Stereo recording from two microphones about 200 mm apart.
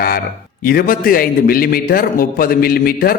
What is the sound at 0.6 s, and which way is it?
A man's voice, 45° left (ahead or behind).